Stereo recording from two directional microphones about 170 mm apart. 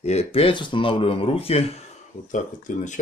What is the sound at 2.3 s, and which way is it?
Speech, 45° left (ahead or behind).